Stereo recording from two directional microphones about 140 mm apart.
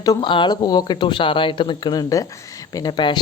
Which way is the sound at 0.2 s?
35° left (ahead or behind).